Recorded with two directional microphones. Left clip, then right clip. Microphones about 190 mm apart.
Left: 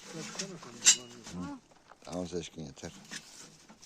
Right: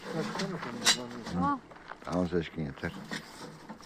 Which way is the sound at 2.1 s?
15° left (ahead or behind).